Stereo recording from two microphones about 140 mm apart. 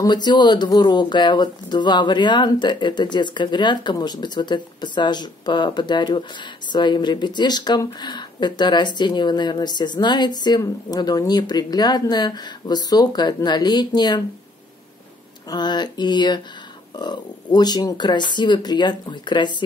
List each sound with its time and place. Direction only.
0.0 s speech: 30° left (ahead or behind)
15.5 s speech: 30° left (ahead or behind)